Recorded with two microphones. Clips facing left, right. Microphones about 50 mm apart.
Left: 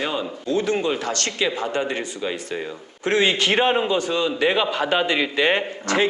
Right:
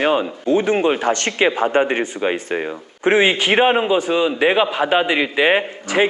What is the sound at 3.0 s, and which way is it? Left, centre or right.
A man's voice, right.